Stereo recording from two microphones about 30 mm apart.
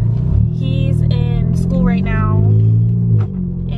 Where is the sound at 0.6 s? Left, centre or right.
Centre.